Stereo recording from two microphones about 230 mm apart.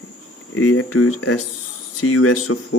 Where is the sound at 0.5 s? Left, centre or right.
Left.